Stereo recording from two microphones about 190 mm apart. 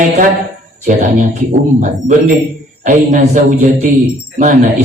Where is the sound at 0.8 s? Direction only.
40° right (ahead or behind).